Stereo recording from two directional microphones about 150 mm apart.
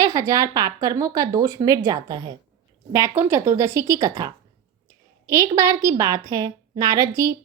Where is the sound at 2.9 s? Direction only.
20° right (ahead or behind).